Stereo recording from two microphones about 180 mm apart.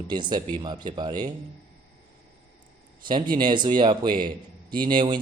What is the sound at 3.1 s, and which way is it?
A man's voice, 25° right (ahead or behind).